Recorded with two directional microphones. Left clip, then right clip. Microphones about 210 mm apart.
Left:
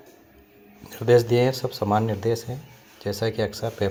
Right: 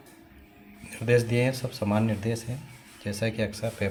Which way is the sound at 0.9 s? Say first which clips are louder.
Left 6 dB; 20° left (ahead or behind).